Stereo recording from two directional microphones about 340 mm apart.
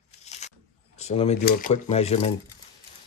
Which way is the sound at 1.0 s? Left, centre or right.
Centre.